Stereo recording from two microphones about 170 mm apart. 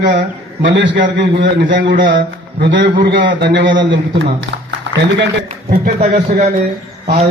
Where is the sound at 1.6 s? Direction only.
55° right (ahead or behind).